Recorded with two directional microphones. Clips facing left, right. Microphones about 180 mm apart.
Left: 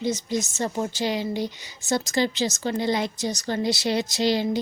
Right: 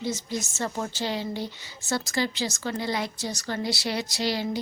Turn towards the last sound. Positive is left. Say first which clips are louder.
# left 5 dB
turn(degrees=20)  # may be behind; listen again after turning